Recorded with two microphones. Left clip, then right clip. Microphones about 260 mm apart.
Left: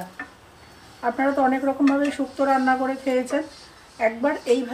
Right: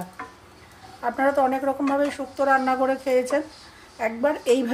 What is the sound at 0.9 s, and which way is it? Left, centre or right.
Speech, right.